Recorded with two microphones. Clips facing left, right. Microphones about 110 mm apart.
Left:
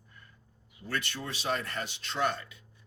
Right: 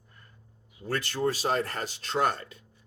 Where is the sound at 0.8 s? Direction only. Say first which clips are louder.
Right 8 dB; 40° right (ahead or behind).